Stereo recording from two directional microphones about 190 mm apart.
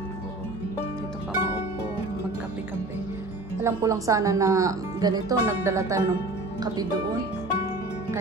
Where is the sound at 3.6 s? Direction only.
15° right (ahead or behind).